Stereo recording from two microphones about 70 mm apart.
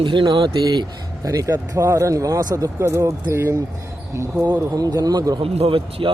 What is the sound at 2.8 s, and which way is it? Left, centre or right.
Speech, right.